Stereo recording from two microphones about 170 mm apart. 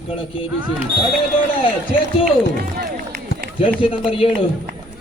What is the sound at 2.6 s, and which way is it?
Run, 55° right (ahead or behind).